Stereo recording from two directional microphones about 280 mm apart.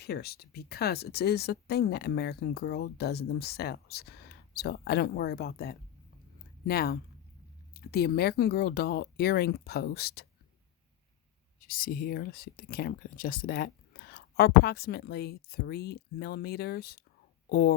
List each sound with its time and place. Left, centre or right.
0.0 s speech: left
11.7 s speech: left